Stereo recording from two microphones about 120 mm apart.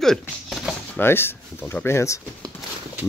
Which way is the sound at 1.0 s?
20° left (ahead or behind).